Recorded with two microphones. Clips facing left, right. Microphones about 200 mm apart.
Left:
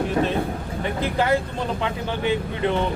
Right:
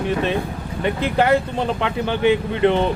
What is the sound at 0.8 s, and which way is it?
Speech, 70° right (ahead or behind).